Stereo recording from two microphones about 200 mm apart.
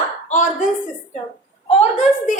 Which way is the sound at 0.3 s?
40° left (ahead or behind).